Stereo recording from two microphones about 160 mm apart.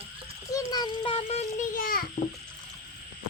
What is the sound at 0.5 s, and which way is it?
Child singing, 25° left (ahead or behind).